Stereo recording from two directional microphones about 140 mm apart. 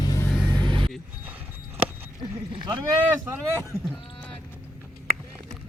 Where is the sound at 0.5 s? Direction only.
35° right (ahead or behind).